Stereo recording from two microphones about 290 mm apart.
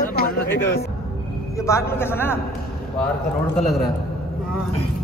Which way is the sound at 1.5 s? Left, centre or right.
Centre.